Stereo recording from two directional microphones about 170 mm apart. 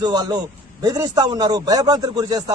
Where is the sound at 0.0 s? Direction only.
25° right (ahead or behind).